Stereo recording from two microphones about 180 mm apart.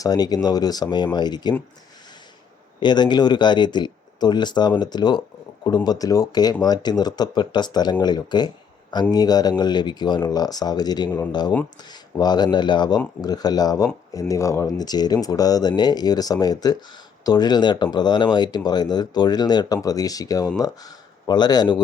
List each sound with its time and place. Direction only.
0.0 s speech: 20° left (ahead or behind)
2.8 s speech: 25° left (ahead or behind)